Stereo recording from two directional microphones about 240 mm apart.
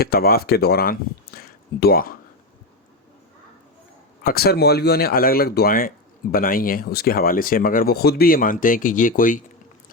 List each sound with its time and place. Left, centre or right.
0.0 s speech: left
4.2 s speech: left